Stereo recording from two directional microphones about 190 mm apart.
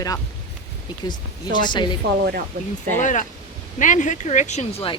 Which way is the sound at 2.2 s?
55° right (ahead or behind).